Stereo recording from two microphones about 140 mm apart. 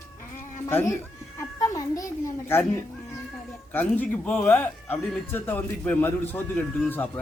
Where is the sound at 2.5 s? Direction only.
15° left (ahead or behind).